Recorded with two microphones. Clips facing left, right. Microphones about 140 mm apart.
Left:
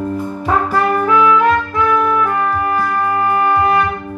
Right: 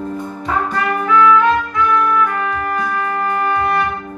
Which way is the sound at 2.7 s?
10° left (ahead or behind).